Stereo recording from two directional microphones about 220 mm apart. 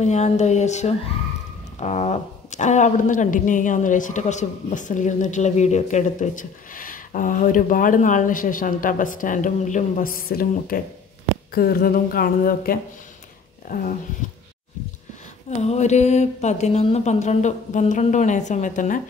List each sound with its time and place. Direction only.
0.0 s speech: 30° left (ahead or behind)
15.6 s speech: 30° left (ahead or behind)